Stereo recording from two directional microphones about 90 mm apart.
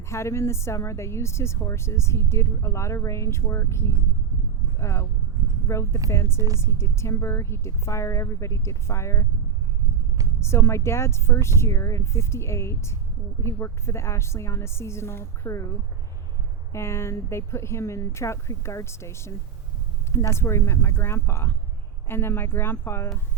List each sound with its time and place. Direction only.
0.1 s speech: 30° left (ahead or behind)
10.4 s speech: 30° left (ahead or behind)
16.7 s speech: 30° left (ahead or behind)
20.4 s speech: 30° left (ahead or behind)